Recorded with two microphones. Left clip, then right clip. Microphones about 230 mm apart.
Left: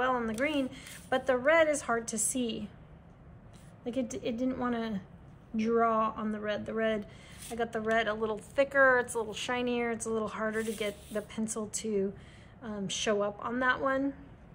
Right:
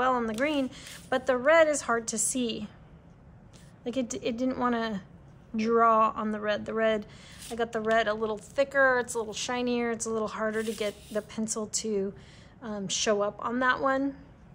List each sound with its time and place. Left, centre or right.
0.0 s a sound: centre
0.3 s a woman's voice: centre
3.8 s a woman's voice: centre
5.5 s speech: centre
5.9 s a woman's voice: centre
7.3 s a sound: centre
7.7 s a woman's voice: centre
10.4 s a woman's voice: centre